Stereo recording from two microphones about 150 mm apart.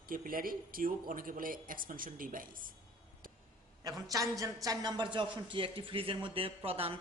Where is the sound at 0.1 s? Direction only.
70° right (ahead or behind).